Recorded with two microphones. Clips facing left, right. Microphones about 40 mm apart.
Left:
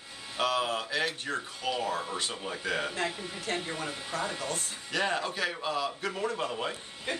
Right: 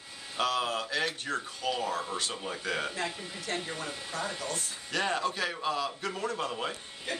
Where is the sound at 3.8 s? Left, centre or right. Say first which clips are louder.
Left 2 dB; left.